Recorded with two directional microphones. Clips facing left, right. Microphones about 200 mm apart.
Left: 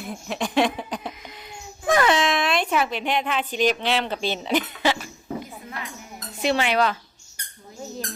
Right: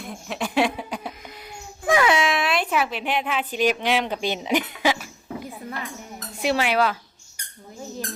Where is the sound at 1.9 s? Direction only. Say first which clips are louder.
Even; 10° right (ahead or behind).